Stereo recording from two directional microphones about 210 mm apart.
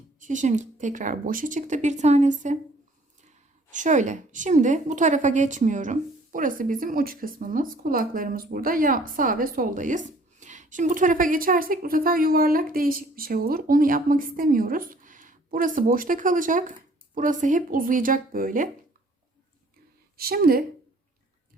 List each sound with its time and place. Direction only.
0.2 s a woman's voice: 35° right (ahead or behind)
3.7 s a woman's voice: 35° right (ahead or behind)
20.1 s speech: 45° right (ahead or behind)